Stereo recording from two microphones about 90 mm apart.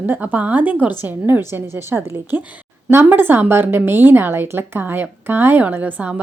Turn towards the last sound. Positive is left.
turn(degrees=-20)  # may be behind; listen again after turning